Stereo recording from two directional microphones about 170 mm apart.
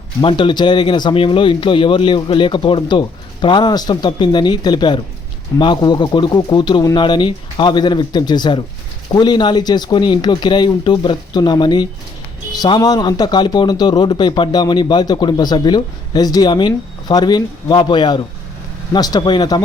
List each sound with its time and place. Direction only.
0.2 s a man's voice: 30° left (ahead or behind)